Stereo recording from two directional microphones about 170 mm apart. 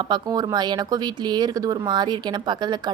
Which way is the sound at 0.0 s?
25° right (ahead or behind).